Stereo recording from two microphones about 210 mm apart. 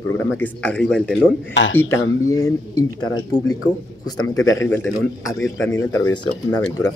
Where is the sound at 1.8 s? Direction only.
15° left (ahead or behind).